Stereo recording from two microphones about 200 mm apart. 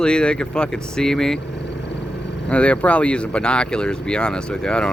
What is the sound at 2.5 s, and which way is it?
Speech, 5° left (ahead or behind).